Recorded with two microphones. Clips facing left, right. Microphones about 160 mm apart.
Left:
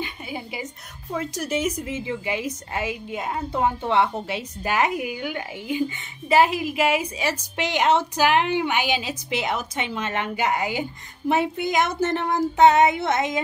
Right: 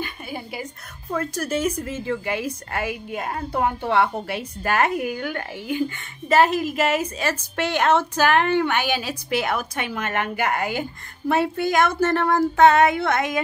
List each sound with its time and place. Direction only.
0.0 s a sound: 15° left (ahead or behind)
1.1 s a woman's voice: 15° left (ahead or behind)
12.2 s child singing: 55° right (ahead or behind)
12.5 s a woman's voice: 20° left (ahead or behind)